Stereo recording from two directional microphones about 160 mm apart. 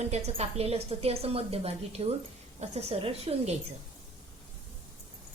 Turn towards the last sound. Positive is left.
turn(degrees=-40)  # may be behind; listen again after turning